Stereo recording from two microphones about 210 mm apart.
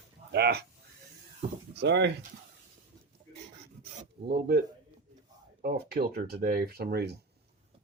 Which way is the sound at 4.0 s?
45° right (ahead or behind).